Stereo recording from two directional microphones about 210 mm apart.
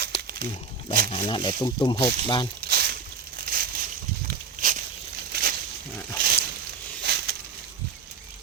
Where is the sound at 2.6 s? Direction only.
50° right (ahead or behind).